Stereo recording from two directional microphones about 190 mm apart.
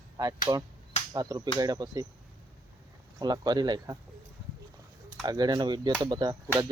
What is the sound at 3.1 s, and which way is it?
Speech, 20° right (ahead or behind).